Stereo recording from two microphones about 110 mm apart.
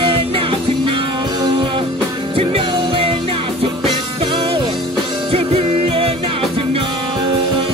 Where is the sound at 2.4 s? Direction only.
60° right (ahead or behind).